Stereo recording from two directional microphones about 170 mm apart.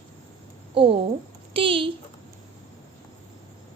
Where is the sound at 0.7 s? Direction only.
30° right (ahead or behind).